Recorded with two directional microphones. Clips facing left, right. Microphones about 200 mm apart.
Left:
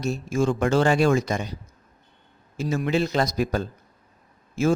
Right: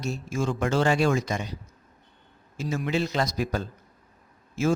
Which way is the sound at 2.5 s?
55° left (ahead or behind).